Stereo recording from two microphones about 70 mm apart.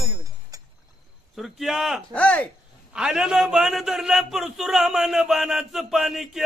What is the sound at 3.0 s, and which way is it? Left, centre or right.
A man's voice, centre.